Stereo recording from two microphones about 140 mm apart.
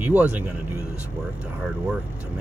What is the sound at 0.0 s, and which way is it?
Speech, 10° right (ahead or behind).